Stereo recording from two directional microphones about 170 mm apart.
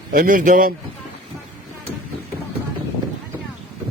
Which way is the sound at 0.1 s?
55° right (ahead or behind).